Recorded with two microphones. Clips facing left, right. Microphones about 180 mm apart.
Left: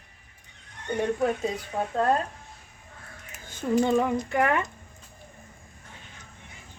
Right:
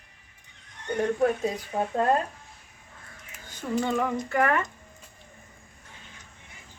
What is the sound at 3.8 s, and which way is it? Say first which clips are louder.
Speech: left 3 dB; 20° left (ahead or behind).